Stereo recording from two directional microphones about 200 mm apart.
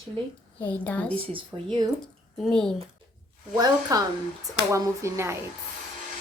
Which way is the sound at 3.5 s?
20° right (ahead or behind).